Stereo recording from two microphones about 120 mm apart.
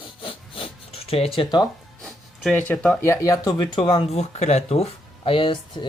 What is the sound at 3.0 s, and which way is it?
Speech, 25° left (ahead or behind).